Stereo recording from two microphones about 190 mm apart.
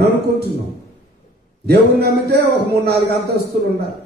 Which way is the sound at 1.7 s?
60° right (ahead or behind).